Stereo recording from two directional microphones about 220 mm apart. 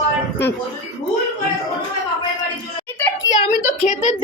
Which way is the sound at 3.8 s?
35° left (ahead or behind).